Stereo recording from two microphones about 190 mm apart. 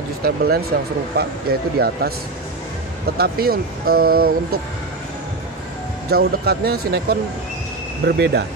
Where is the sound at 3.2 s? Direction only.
55° right (ahead or behind).